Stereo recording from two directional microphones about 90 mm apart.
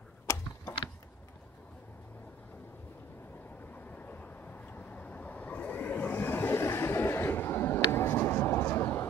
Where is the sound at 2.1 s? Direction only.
20° left (ahead or behind).